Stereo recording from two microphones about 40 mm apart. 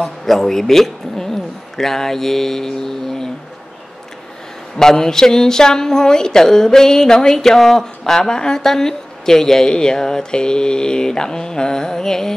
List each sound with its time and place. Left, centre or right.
0.0 s speech: centre
4.7 s speech: centre